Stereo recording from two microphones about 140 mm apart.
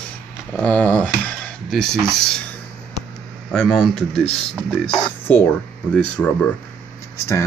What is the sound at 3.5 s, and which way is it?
Speech, 5° left (ahead or behind).